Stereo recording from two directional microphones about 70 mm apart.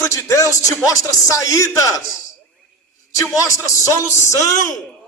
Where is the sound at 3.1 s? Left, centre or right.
Left.